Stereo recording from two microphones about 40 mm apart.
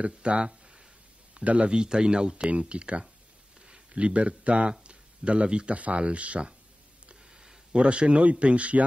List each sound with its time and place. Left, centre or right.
0.0 s speech: right
1.7 s speech: right
4.8 s a sound: right
5.8 s speech: right
7.1 s a sound: centre
7.7 s speech: right